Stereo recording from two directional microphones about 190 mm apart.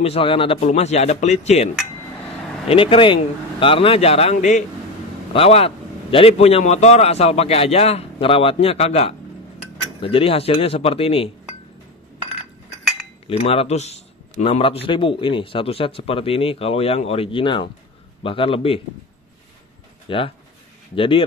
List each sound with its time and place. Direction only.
0.0 s a man's voice: 30° left (ahead or behind)
2.7 s a man's voice: 30° left (ahead or behind)
13.3 s a man's voice: 30° left (ahead or behind)
20.1 s a man's voice: 30° left (ahead or behind)